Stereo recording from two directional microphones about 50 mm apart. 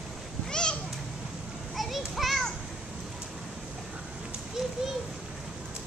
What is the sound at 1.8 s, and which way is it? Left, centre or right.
Children playing, centre.